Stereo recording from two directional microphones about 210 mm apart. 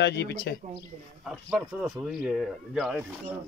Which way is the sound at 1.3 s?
Centre (ahead or behind).